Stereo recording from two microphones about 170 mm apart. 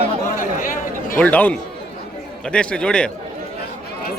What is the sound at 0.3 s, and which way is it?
Chatter, 55° left (ahead or behind).